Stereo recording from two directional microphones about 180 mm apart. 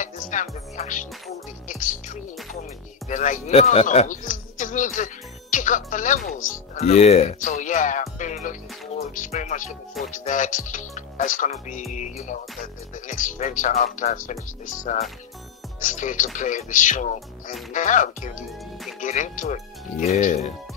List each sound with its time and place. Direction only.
0.0 s music: 45° left (ahead or behind)
3.1 s speech: 45° left (ahead or behind)